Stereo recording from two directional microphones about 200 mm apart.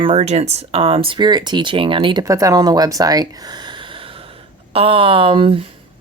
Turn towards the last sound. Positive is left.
turn(degrees=-25)  # may be behind; listen again after turning